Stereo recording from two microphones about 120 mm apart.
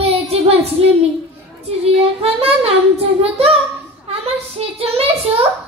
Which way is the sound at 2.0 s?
55° right (ahead or behind).